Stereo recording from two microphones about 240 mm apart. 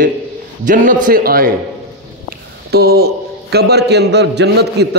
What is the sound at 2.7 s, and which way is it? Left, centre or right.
A man's voice, right.